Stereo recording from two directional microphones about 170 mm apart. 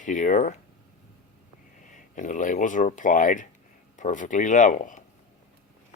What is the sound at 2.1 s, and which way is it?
Speech, 50° left (ahead or behind).